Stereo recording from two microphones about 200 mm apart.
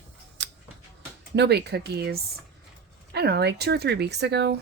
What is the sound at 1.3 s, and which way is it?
Speech, 55° right (ahead or behind).